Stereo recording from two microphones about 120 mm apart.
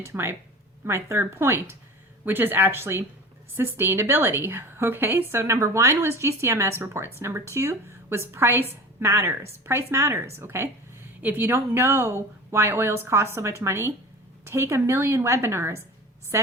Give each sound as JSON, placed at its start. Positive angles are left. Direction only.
{"t": 0.0, "sound": "a woman's voice", "side_deg": -20}